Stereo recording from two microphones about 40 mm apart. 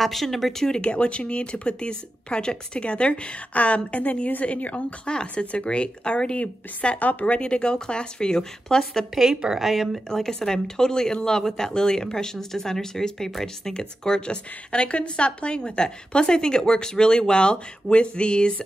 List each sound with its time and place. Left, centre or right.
0.0 s speech: centre
0.7 s speech: left
5.0 s speech: left
7.0 s a woman's voice: left
7.3 s speech: left
9.1 s speech: centre
10.0 s speech: centre
13.7 s speech: left